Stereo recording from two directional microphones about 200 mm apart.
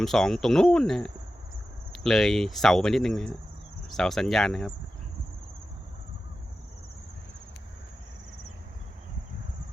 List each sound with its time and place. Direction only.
0.0 s speech: centre (ahead or behind)